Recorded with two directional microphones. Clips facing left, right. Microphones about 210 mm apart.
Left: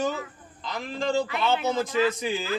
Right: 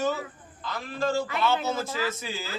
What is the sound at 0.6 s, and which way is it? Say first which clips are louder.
A man's voice: even; 15° left (ahead or behind).